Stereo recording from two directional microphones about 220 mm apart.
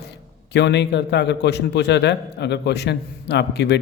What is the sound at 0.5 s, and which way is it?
A man's voice, 50° left (ahead or behind).